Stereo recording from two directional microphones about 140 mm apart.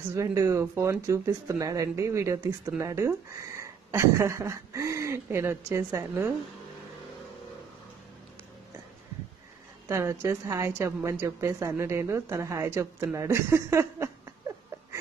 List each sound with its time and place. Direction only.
0.1 s a woman's voice: 20° right (ahead or behind)
9.8 s a woman's voice: 20° right (ahead or behind)